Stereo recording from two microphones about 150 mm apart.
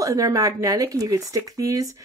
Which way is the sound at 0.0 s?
20° right (ahead or behind).